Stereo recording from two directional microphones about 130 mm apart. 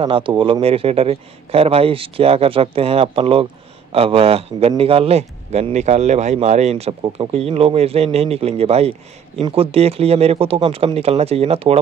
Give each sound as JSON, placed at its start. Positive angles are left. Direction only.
{"t": 0.0, "sound": "a man's voice", "side_deg": -40}